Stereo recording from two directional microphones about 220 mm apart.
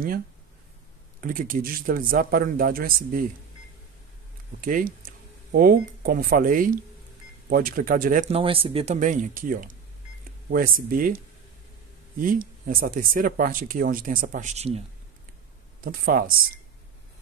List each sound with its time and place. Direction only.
1.2 s speech: 40° right (ahead or behind)
4.6 s speech: 40° right (ahead or behind)
8.4 s speech: 25° right (ahead or behind)
15.8 s speech: 40° right (ahead or behind)